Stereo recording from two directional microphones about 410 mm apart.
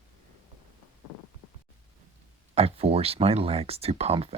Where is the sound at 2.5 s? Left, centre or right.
Centre.